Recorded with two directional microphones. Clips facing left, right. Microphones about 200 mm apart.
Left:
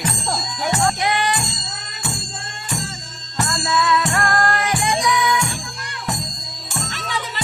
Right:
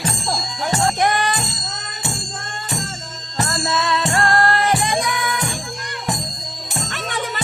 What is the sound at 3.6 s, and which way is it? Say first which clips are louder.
Music: left 3 dB; 30° right (ahead or behind).